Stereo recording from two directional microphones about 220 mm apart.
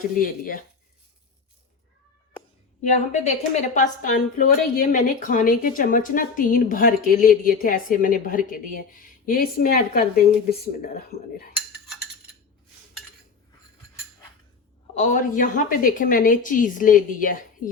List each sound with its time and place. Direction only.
0.0 s a woman's voice: 40° left (ahead or behind)
2.8 s a woman's voice: 30° left (ahead or behind)
14.9 s a woman's voice: 35° left (ahead or behind)